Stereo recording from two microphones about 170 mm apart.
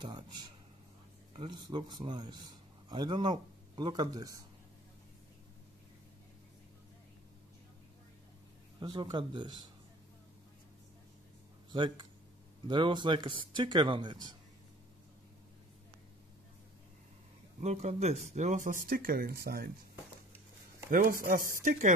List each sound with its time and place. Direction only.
0.0 s speech: 25° right (ahead or behind)
8.7 s speech: 25° right (ahead or behind)
11.7 s speech: 25° right (ahead or behind)
17.6 s speech: 40° right (ahead or behind); by 19.7 s 65° right (ahead or behind)
20.9 s speech: 55° right (ahead or behind)